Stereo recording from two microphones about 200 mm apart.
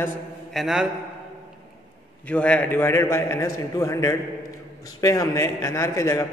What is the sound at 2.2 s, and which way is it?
A man's voice, 5° left (ahead or behind).